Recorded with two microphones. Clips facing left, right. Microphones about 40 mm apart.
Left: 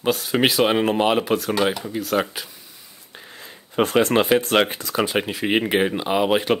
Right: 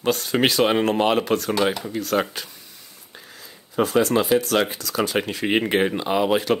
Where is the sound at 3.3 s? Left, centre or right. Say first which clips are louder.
Left 1 dB; left.